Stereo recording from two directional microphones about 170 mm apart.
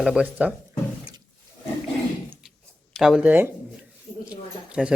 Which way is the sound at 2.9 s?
Centre (ahead or behind).